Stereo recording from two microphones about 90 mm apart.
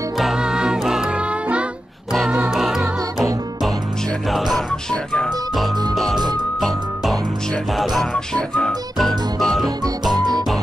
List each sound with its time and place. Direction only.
0.2 s music: 5° right (ahead or behind)
2.5 s music: 5° right (ahead or behind)
4.3 s music: centre (ahead or behind)
4.9 s music: 10° left (ahead or behind)
6.1 s music: 50° right (ahead or behind)
7.7 s music: centre (ahead or behind)
10.1 s music: 50° right (ahead or behind)